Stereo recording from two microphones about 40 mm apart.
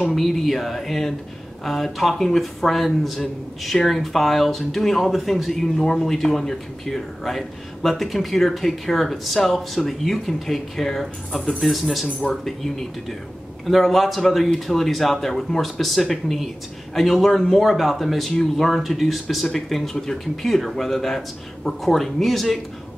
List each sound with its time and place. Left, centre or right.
0.1 s speech: centre
13.7 s speech: centre
18.3 s speech: centre
18.8 s speech: centre
19.4 s speech: centre